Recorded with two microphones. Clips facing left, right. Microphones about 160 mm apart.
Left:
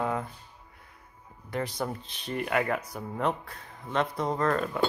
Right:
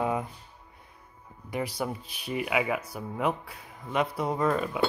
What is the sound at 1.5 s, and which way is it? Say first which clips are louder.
Speech: even; 10° right (ahead or behind).